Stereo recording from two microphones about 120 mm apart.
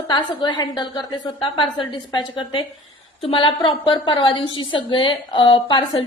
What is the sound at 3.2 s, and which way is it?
Speech, 50° left (ahead or behind).